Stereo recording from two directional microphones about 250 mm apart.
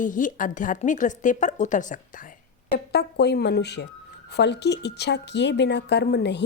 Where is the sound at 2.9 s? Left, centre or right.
Left.